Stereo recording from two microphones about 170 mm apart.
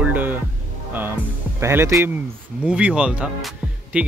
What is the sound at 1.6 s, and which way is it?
Speech, 15° right (ahead or behind).